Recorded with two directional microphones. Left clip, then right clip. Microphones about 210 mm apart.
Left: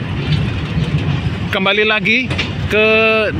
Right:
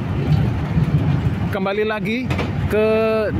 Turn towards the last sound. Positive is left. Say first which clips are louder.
# left 5 dB
turn(degrees=-5)  # may be behind; listen again after turning